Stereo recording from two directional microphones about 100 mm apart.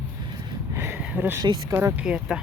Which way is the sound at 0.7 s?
25° right (ahead or behind).